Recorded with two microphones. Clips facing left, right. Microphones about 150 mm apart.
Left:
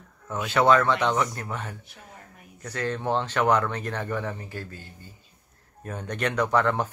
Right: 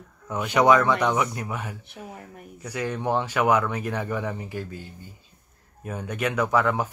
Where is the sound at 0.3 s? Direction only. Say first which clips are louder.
Right 2 dB; 15° right (ahead or behind).